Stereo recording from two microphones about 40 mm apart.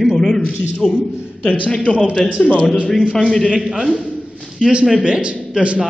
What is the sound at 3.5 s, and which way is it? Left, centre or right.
Speech, centre.